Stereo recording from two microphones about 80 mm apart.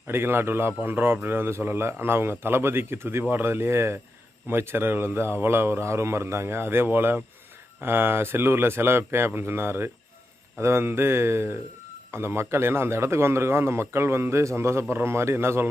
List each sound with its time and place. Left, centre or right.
0.1 s a man's voice: right